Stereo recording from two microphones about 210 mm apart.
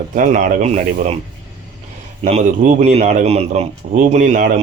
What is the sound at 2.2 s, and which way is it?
Speech, 35° right (ahead or behind).